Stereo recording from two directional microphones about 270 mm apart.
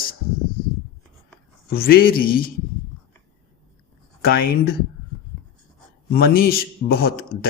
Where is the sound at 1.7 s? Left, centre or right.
Left.